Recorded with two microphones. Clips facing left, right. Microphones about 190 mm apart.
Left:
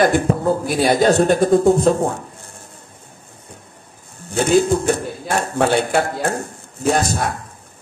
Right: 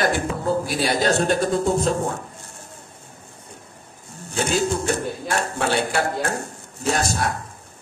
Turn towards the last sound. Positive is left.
turn(degrees=55)  # may be behind; listen again after turning